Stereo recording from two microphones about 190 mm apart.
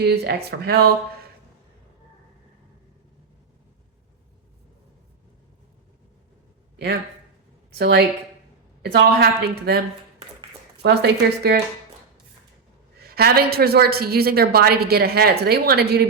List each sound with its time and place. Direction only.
0.0 s a woman's voice: 55° right (ahead or behind)
7.7 s a woman's voice: 60° right (ahead or behind)
10.8 s a woman's voice: 60° right (ahead or behind)
13.0 s a woman's voice: 55° right (ahead or behind)